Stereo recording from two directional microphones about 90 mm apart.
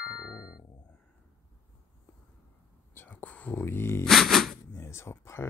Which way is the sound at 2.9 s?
20° left (ahead or behind).